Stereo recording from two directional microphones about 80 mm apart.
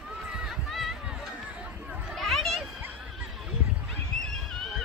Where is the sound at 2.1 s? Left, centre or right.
Centre.